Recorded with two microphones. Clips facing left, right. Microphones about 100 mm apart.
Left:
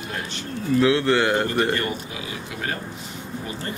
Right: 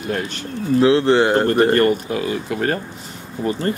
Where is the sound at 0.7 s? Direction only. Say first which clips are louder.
Right 5 dB; 30° right (ahead or behind).